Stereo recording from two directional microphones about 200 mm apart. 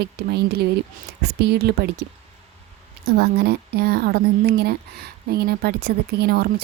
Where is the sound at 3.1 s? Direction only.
55° right (ahead or behind).